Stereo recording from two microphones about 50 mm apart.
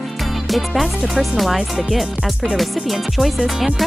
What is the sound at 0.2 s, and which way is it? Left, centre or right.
Music, centre.